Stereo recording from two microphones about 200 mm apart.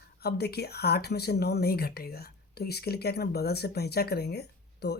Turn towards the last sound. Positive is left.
turn(degrees=55)  # may be behind; listen again after turning